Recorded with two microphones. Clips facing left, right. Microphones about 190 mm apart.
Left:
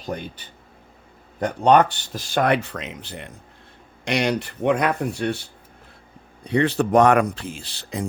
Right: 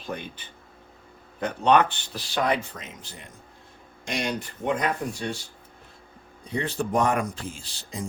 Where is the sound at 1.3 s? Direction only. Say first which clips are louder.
Left 4 dB; 40° left (ahead or behind).